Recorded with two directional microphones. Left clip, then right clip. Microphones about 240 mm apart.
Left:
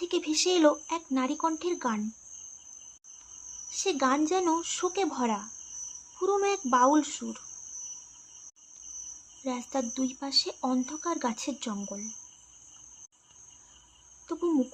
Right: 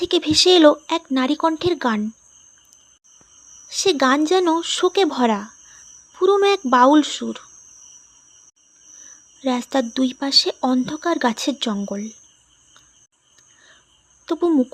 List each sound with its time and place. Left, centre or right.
0.0 s speech: right
3.7 s speech: right
9.4 s speech: right
14.3 s speech: right